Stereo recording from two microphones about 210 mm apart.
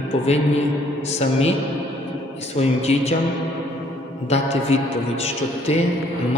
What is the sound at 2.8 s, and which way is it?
Speech, 30° left (ahead or behind).